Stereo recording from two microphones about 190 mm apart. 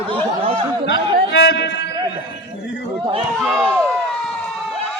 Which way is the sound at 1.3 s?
65° left (ahead or behind).